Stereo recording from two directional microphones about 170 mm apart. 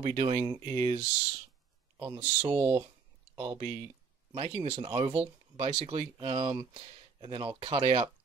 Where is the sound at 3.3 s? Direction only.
30° right (ahead or behind).